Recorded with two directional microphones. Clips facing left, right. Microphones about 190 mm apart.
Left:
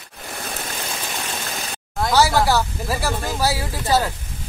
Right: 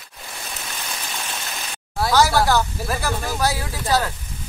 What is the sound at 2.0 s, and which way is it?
Speech, centre (ahead or behind).